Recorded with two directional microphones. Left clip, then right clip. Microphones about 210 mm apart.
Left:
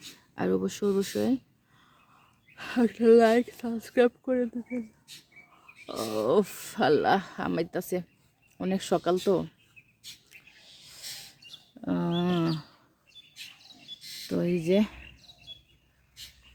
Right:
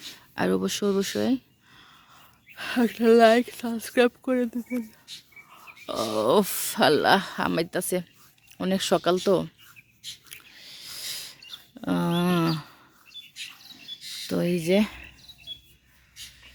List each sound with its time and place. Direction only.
0.3 s speech: 10° right (ahead or behind)
5.1 s speech: 35° left (ahead or behind)
5.8 s speech: 10° right (ahead or behind)
11.8 s a sound: 10° right (ahead or behind)
14.0 s a sound: 25° left (ahead or behind)
14.3 s speech: 5° right (ahead or behind)